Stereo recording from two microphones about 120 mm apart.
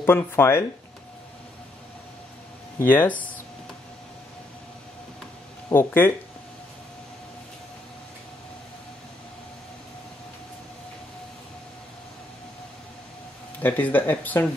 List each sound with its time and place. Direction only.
0.0 s speech: 20° left (ahead or behind)
2.8 s speech: 15° left (ahead or behind)
5.7 s speech: 20° left (ahead or behind)
13.6 s speech: 15° left (ahead or behind)